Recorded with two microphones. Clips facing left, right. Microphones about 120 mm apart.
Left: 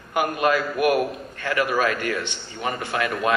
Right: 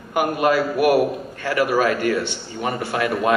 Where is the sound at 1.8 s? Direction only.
20° right (ahead or behind).